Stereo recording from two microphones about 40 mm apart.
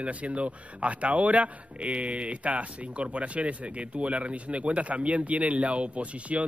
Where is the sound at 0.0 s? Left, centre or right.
Right.